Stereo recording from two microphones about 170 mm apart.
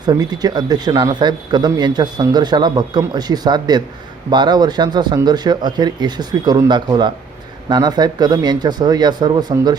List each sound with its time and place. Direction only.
0.0 s speech: 25° right (ahead or behind)